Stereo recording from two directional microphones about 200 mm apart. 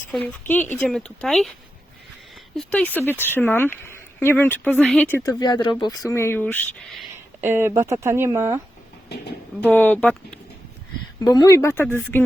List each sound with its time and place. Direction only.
0.1 s speech: 5° left (ahead or behind)
2.6 s speech: 5° left (ahead or behind)
7.4 s speech: 10° right (ahead or behind)
9.0 s speech: 55° left (ahead or behind)
9.6 s speech: 10° left (ahead or behind)
11.2 s speech: 20° left (ahead or behind)